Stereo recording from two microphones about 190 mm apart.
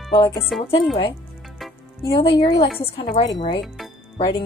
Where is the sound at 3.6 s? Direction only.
Centre (ahead or behind).